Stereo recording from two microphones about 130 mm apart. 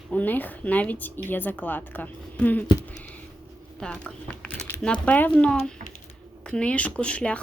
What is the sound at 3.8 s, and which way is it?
A woman's voice, 5° left (ahead or behind).